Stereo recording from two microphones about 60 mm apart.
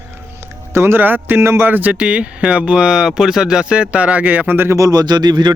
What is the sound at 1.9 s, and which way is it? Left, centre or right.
Speech, centre.